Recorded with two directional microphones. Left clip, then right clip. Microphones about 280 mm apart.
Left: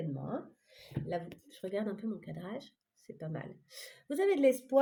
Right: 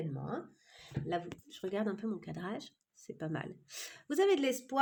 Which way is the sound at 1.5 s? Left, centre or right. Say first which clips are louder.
Even; right.